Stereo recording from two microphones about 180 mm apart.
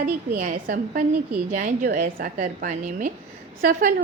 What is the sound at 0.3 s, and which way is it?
A woman's voice, 50° right (ahead or behind).